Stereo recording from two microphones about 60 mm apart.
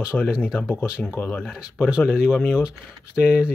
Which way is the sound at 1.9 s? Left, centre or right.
Centre.